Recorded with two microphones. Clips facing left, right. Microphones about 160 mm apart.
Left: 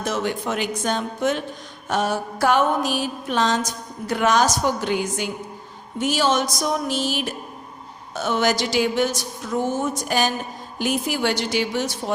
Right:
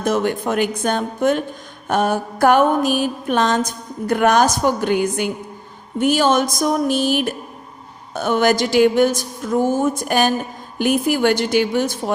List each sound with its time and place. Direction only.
0.0 s music: 50° right (ahead or behind)
4.0 s a woman's voice: 55° right (ahead or behind)
6.0 s music: 55° right (ahead or behind)